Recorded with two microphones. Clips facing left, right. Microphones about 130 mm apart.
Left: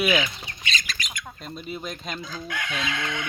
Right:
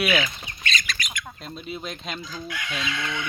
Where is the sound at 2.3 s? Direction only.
50° left (ahead or behind).